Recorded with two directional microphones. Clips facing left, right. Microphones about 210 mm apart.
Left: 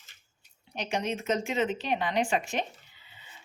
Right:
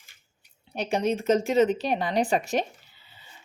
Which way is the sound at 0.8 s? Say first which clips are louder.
Right 6 dB; 35° right (ahead or behind).